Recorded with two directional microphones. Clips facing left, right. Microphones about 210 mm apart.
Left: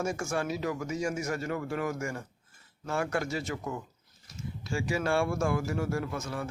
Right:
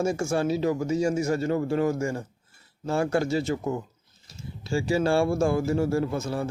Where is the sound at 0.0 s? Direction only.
30° right (ahead or behind).